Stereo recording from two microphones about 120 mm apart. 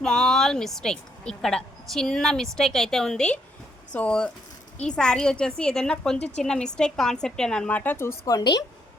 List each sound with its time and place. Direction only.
0.0 s a woman's voice: 5° left (ahead or behind)
6.1 s a woman's voice: 60° left (ahead or behind)
6.4 s a woman's voice: 5° left (ahead or behind); by 8.5 s 30° left (ahead or behind)